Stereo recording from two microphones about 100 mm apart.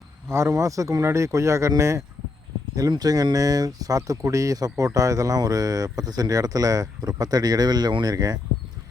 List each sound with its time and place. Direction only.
0.3 s speech: 30° right (ahead or behind)